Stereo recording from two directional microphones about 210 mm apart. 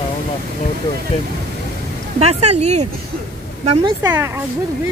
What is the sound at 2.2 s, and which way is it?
Speech, 30° right (ahead or behind).